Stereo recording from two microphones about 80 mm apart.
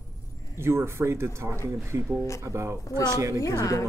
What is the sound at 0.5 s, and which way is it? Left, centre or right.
Speech, right.